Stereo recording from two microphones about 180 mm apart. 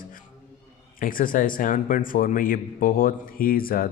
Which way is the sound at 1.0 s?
50° left (ahead or behind).